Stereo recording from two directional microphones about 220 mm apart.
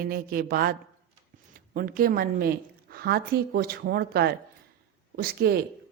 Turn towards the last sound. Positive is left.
turn(degrees=-45)  # may be behind; listen again after turning